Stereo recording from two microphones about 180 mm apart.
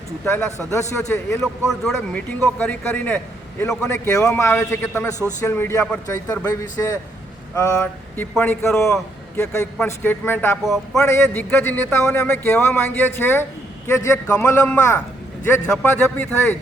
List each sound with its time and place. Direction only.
0.7 s a man's voice: 15° left (ahead or behind)
1.4 s a man's voice: centre (ahead or behind)